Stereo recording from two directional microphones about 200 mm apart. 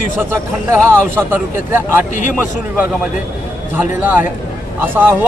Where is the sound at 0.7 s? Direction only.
10° right (ahead or behind).